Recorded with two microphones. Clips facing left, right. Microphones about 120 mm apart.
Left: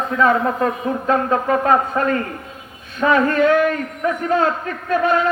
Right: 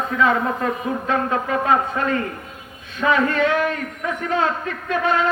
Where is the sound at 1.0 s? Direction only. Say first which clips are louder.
Left 5 dB; 40° left (ahead or behind).